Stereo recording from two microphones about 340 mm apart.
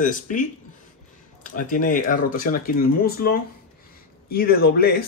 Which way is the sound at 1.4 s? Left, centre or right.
Left.